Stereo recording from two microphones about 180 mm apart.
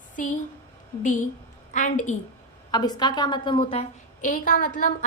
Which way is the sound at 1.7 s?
45° left (ahead or behind).